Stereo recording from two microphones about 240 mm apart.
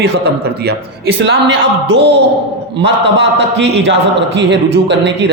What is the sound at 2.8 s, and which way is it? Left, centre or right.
A man's voice, right.